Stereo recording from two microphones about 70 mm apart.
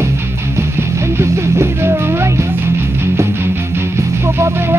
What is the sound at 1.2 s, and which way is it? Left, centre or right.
Music, right.